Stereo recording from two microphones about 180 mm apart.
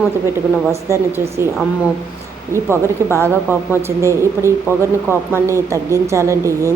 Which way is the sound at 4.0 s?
15° right (ahead or behind).